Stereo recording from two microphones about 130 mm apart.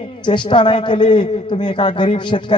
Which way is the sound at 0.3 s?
40° left (ahead or behind).